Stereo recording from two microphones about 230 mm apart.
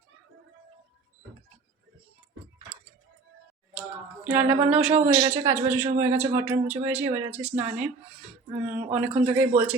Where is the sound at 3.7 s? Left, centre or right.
Centre.